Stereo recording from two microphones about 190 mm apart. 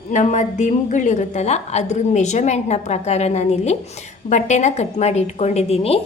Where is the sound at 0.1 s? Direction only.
40° left (ahead or behind).